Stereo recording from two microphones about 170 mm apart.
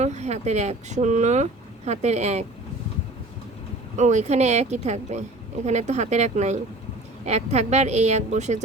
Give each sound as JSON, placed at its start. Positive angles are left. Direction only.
{"t": 0.0, "sound": "speech", "side_deg": -40}
{"t": 3.9, "sound": "speech", "side_deg": -45}